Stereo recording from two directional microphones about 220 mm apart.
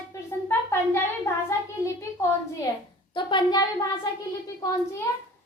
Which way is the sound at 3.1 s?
20° left (ahead or behind).